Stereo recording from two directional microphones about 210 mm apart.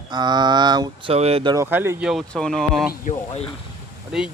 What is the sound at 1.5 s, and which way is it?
Speech, 10° right (ahead or behind).